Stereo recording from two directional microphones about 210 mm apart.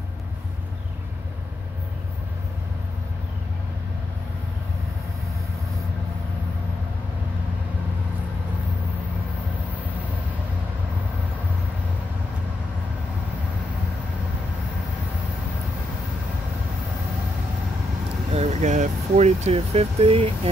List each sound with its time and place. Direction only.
18.3 s speech: 30° right (ahead or behind)